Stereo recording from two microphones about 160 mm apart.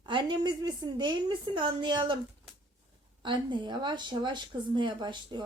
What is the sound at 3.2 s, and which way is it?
A woman's voice, 30° right (ahead or behind).